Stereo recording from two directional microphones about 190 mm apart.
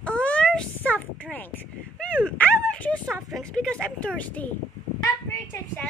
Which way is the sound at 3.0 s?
Centre (ahead or behind).